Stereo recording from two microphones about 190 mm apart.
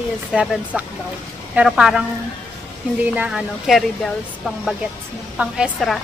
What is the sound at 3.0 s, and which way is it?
Speech, 5° right (ahead or behind).